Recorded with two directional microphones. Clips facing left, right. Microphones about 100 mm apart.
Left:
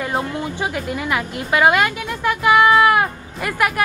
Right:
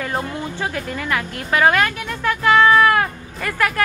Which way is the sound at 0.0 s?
15° left (ahead or behind).